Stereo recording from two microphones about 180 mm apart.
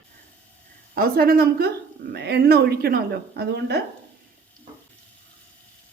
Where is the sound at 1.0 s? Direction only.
55° right (ahead or behind).